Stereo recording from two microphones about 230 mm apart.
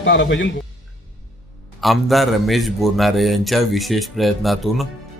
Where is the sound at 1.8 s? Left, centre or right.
Centre.